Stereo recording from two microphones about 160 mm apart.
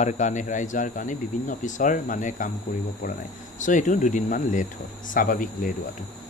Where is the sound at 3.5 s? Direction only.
50° left (ahead or behind).